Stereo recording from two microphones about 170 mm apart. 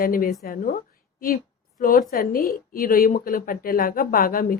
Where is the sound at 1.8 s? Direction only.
60° left (ahead or behind).